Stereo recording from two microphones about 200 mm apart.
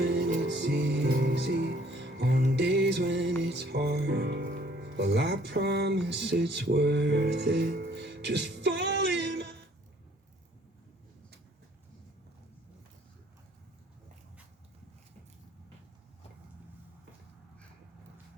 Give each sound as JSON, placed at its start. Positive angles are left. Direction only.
{"t": 0.0, "sound": "music", "side_deg": -55}